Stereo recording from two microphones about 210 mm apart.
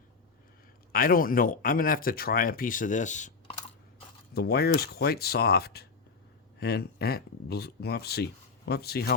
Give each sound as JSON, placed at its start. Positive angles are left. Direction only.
{"t": 0.9, "sound": "speech", "side_deg": 45}
{"t": 4.4, "sound": "speech", "side_deg": 45}